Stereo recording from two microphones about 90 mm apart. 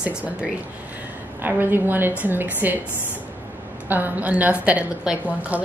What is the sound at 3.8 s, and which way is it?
A woman's voice, 20° right (ahead or behind).